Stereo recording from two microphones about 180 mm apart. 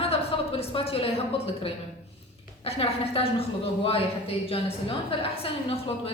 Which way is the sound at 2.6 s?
35° left (ahead or behind).